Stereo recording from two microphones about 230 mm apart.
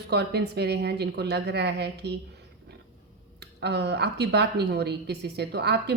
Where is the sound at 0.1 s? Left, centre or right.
Right.